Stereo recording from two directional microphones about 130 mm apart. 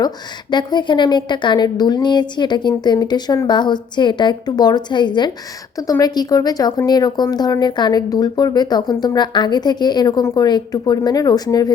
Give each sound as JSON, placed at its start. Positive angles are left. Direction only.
{"t": 0.5, "sound": "a woman's voice", "side_deg": 35}